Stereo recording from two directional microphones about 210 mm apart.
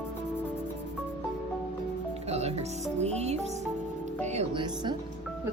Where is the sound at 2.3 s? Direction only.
30° right (ahead or behind).